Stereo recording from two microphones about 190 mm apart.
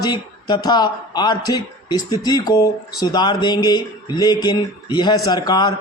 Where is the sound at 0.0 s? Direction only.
20° left (ahead or behind).